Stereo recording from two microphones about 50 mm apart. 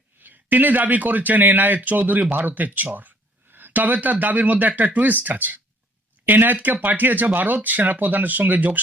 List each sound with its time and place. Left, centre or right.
0.2 s speech: right